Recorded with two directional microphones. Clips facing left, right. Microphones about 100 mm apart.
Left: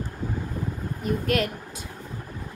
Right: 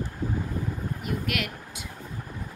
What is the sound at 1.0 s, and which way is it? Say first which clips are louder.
Speech: left 7 dB; 35° left (ahead or behind).